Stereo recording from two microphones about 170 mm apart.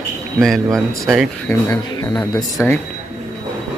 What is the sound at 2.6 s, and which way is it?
Speech, 10° left (ahead or behind).